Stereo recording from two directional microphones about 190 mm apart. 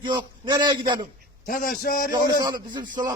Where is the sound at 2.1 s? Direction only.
20° right (ahead or behind).